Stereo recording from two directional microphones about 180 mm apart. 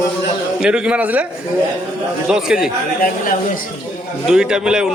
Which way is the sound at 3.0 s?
50° left (ahead or behind).